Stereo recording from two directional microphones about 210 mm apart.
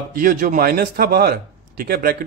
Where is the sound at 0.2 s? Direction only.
40° right (ahead or behind).